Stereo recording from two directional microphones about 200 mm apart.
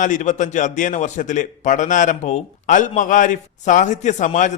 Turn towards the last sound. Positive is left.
turn(degrees=40)  # may be behind; listen again after turning